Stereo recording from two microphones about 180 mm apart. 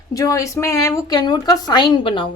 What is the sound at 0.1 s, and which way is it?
A woman's voice, 20° left (ahead or behind).